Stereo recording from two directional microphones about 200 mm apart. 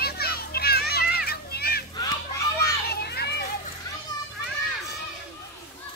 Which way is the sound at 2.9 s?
50° left (ahead or behind).